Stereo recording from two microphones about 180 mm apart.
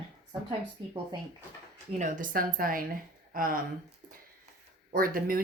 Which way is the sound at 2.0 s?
45° right (ahead or behind).